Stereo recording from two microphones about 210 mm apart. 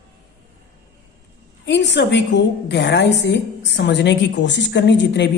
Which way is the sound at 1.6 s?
55° left (ahead or behind).